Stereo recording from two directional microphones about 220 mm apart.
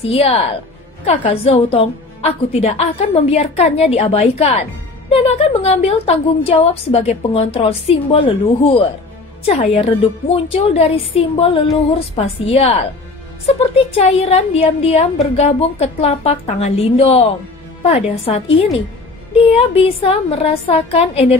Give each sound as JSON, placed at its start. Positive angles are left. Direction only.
{"t": 0.0, "sound": "a woman's voice", "side_deg": 25}